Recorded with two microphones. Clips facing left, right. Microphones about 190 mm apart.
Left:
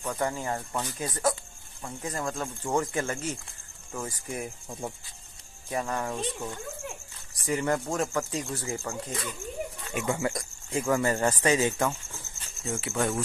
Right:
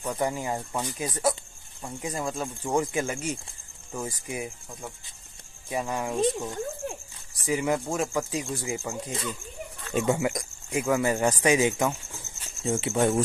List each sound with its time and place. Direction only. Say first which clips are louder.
0.0 s speech: right 2 dB; 15° right (ahead or behind)
5.7 s speech: right 1 dB; 10° right (ahead or behind)
7.4 s speech: right 1 dB; 5° right (ahead or behind)